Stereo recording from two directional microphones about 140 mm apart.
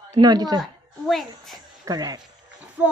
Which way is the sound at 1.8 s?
25° right (ahead or behind).